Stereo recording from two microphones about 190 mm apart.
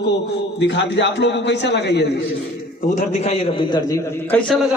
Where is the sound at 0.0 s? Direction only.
65° left (ahead or behind).